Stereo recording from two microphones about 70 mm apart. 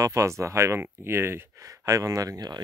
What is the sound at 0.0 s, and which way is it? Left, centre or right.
Speech, right.